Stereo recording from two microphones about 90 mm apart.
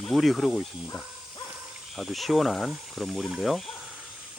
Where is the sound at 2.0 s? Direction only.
Centre (ahead or behind).